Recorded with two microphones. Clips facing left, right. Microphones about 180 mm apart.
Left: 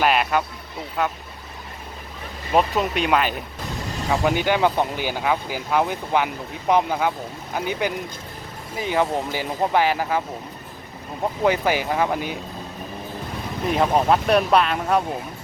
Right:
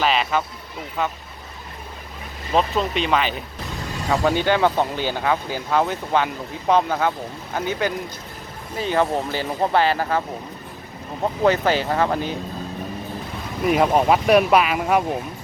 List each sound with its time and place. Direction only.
0.0 s speech: 10° left (ahead or behind)
2.5 s speech: 10° left (ahead or behind)
11.4 s speech: 10° left (ahead or behind)
13.7 s speech: 5° right (ahead or behind)